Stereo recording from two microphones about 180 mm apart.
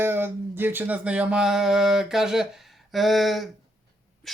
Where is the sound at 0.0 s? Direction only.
10° right (ahead or behind).